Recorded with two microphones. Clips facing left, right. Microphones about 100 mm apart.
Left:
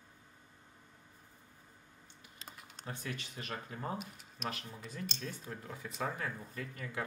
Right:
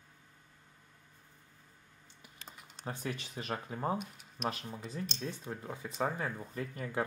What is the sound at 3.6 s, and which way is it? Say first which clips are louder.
Speech: right 8 dB; 25° right (ahead or behind).